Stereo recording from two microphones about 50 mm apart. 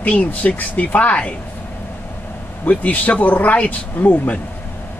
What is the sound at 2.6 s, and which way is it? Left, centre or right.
Speech, left.